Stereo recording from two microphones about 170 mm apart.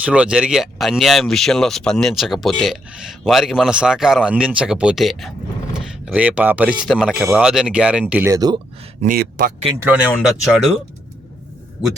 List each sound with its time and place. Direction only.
0.0 s speech: 5° right (ahead or behind)
9.0 s speech: 55° right (ahead or behind)
9.8 s speech: 5° right (ahead or behind)